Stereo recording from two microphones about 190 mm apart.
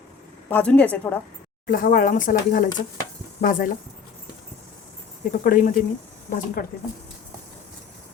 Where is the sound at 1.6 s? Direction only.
50° left (ahead or behind).